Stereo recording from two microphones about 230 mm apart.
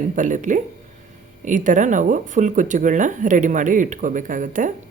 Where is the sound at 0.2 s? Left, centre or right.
Right.